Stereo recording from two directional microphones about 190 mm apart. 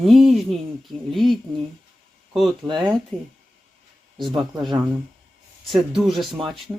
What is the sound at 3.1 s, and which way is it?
Speech, 5° left (ahead or behind).